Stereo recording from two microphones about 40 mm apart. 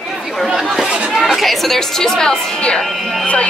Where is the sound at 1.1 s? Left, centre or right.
Centre.